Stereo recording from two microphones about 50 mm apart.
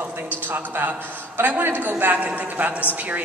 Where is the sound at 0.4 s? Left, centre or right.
Right.